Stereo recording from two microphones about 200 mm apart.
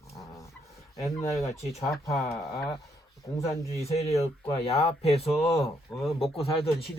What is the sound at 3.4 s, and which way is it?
Speech, 30° left (ahead or behind).